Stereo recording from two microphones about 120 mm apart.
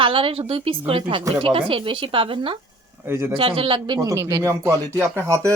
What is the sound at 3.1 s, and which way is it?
Speech, 20° right (ahead or behind).